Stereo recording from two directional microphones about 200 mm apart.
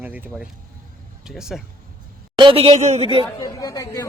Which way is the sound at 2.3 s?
25° right (ahead or behind).